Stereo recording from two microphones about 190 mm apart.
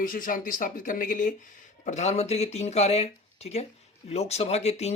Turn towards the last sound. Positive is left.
turn(degrees=35)  # may be behind; listen again after turning